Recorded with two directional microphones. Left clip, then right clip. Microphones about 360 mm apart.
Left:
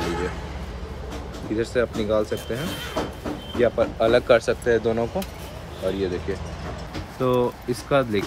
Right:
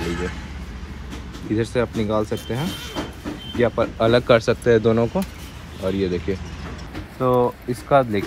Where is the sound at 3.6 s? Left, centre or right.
Centre.